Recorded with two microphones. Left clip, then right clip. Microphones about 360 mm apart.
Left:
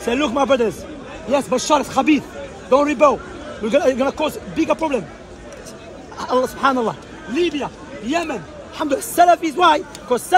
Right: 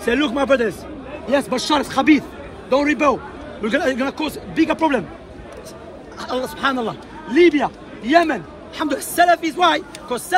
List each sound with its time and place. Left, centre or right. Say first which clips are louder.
0.1 s a man's voice: even; centre
6.1 s a man's voice: left 5 dB; centre